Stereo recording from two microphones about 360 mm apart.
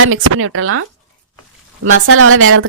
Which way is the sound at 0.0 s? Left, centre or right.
Right.